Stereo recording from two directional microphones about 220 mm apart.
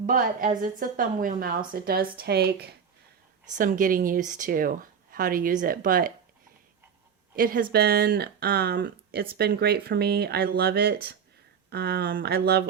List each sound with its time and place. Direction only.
0.0 s a woman's voice: 35° right (ahead or behind)
7.3 s a woman's voice: 40° right (ahead or behind)